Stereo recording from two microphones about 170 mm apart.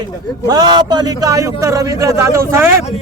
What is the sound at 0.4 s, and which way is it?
A man's voice, 25° right (ahead or behind).